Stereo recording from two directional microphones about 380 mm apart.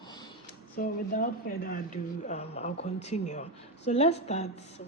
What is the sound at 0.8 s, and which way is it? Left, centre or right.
Speech, left.